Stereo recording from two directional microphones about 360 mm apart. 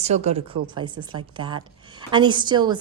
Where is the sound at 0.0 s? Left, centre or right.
Centre.